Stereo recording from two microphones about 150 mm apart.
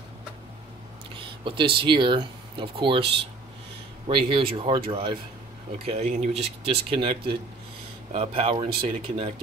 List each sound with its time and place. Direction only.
1.1 s a sound: 35° right (ahead or behind)
1.8 s speech: 35° right (ahead or behind)
4.1 s speech: 35° right (ahead or behind)
5.9 s speech: 45° right (ahead or behind)